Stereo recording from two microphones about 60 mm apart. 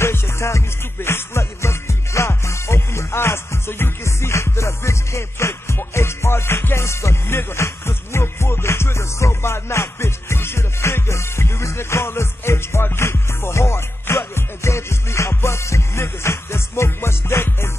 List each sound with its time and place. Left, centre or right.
0.0 s music: left